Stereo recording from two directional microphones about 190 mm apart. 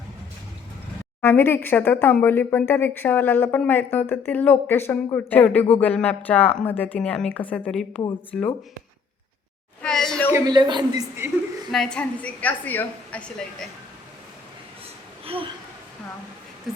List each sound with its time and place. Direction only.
1.2 s speech: 10° left (ahead or behind)
9.8 s a sound: 5° left (ahead or behind)
10.3 s a man's voice: 20° right (ahead or behind)
11.7 s speech: 5° left (ahead or behind)
15.2 s a sound: 30° right (ahead or behind)
16.7 s speech: centre (ahead or behind)